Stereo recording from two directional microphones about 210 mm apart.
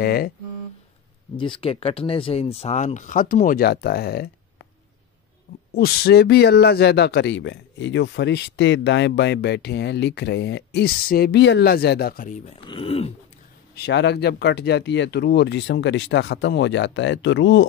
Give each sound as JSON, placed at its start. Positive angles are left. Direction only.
{"t": 0.0, "sound": "a man's voice", "side_deg": 45}
{"t": 1.6, "sound": "speech", "side_deg": 25}
{"t": 5.7, "sound": "a man's voice", "side_deg": 50}
{"t": 12.5, "sound": "speech", "side_deg": 25}
{"t": 13.7, "sound": "speech", "side_deg": 55}